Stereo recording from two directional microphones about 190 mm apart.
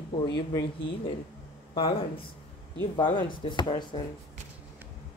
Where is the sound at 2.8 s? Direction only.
25° left (ahead or behind).